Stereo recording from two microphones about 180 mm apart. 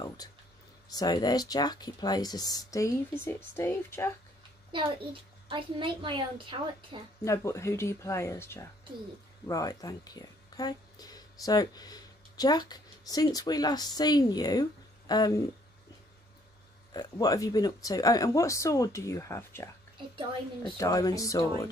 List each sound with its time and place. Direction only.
0.9 s speech: 20° left (ahead or behind)
5.5 s a woman's voice: 25° right (ahead or behind)
7.2 s speech: 15° left (ahead or behind)
16.9 s speech: 20° left (ahead or behind)
20.7 s speech: 20° left (ahead or behind)